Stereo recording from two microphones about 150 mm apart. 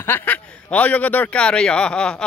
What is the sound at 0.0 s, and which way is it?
Speech, 15° left (ahead or behind).